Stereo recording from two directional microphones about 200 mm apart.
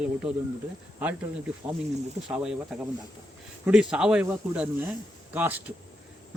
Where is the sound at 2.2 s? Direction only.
5° right (ahead or behind).